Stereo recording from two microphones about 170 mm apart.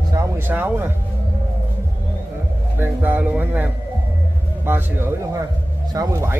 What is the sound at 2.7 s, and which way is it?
Speech, 10° right (ahead or behind).